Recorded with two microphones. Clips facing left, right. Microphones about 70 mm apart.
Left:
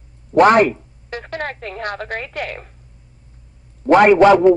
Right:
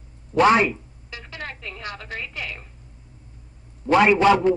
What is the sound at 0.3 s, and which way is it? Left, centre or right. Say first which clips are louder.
A woman's voice: left 5 dB; left.